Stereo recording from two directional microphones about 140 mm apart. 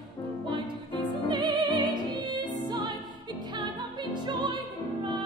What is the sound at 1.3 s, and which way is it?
Music, 30° right (ahead or behind).